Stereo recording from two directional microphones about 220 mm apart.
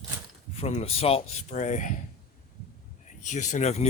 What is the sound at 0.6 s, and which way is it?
Speech, 30° left (ahead or behind).